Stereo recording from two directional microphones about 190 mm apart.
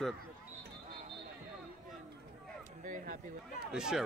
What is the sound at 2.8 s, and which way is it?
Speech, 45° right (ahead or behind).